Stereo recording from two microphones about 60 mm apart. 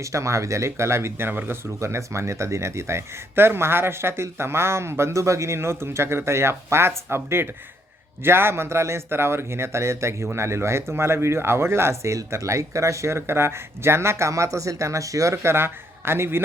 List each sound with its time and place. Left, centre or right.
0.0 s speech: right
1.8 s speech: right
15.4 s speech: right